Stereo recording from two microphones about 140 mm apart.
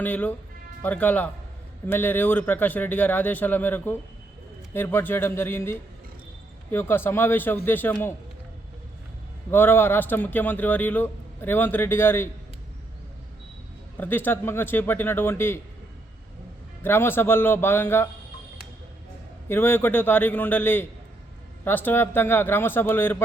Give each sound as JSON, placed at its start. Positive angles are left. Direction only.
{"t": 0.0, "sound": "a man's voice", "side_deg": 10}
{"t": 9.5, "sound": "a man's voice", "side_deg": 15}
{"t": 13.9, "sound": "a man's voice", "side_deg": 15}
{"t": 16.8, "sound": "a man's voice", "side_deg": 15}
{"t": 19.5, "sound": "a man's voice", "side_deg": 15}